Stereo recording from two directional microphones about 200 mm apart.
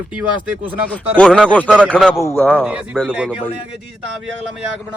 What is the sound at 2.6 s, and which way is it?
Speech, centre (ahead or behind).